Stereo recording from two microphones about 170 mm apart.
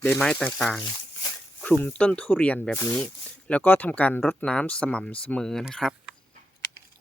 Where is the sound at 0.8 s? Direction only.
20° left (ahead or behind).